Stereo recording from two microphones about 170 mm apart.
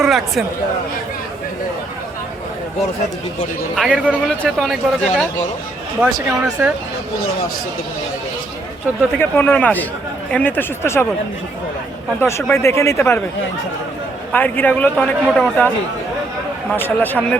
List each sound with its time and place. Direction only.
0.0 s speech: centre (ahead or behind)
3.8 s a man's voice: 5° right (ahead or behind)
6.4 s a man's voice: 5° right (ahead or behind)
9.1 s a man's voice: 10° left (ahead or behind)
12.2 s a man's voice: 15° left (ahead or behind)
14.3 s a man's voice: 10° left (ahead or behind)
16.7 s a man's voice: 10° left (ahead or behind)